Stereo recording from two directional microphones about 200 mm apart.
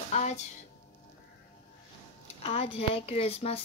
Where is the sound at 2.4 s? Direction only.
30° left (ahead or behind).